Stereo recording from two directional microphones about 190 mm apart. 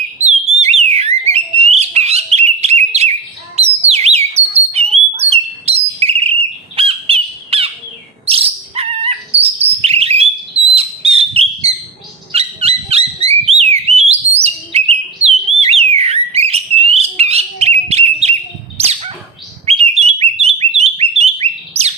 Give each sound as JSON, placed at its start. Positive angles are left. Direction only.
{"t": 0.6, "sound": "alarm", "side_deg": -35}
{"t": 1.3, "sound": "bird", "side_deg": -35}
{"t": 12.3, "sound": "a sound", "side_deg": -30}
{"t": 13.2, "sound": "whistle", "side_deg": -30}
{"t": 18.8, "sound": "bird", "side_deg": -30}